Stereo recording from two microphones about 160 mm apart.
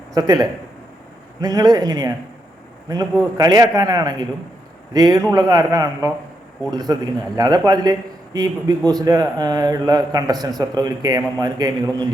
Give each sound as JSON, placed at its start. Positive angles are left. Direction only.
{"t": 0.1, "sound": "a man's voice", "side_deg": -25}